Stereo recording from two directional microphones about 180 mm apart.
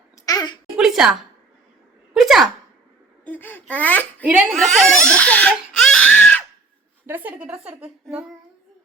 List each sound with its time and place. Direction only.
0.3 s a sound: 25° left (ahead or behind)
0.8 s a sound: 5° right (ahead or behind)
2.1 s speech: centre (ahead or behind)
3.2 s speech: 10° left (ahead or behind)
4.2 s a woman's voice: 10° right (ahead or behind)
5.0 s crying: 5° left (ahead or behind)
7.1 s a woman's voice: 10° right (ahead or behind)